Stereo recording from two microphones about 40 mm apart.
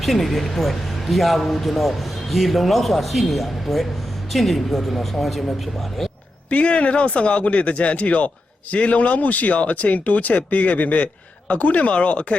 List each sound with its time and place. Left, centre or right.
0.0 s speech: centre
6.5 s speech: left